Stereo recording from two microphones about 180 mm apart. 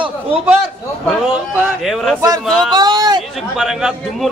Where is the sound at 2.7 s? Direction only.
25° right (ahead or behind).